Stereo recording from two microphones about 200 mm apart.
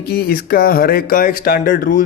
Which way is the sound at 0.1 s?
50° left (ahead or behind).